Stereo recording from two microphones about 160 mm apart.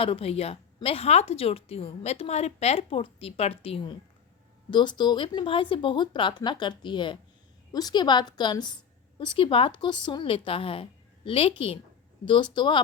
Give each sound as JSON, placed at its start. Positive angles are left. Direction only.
{"t": 0.0, "sound": "speech", "side_deg": 35}